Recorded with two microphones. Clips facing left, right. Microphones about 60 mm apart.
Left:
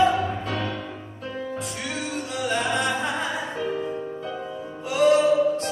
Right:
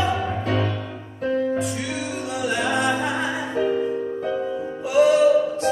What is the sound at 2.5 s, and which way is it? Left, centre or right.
Music, right.